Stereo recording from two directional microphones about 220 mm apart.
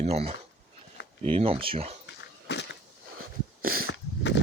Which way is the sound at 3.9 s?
55° left (ahead or behind).